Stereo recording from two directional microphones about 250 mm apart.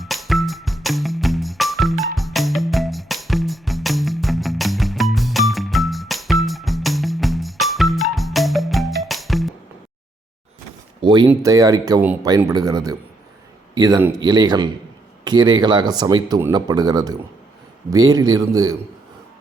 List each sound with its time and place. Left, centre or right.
0.0 s music: centre
11.0 s a sound: centre
11.3 s speech: centre